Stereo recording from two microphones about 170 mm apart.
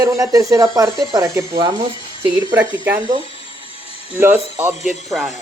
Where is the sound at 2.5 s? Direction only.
10° right (ahead or behind).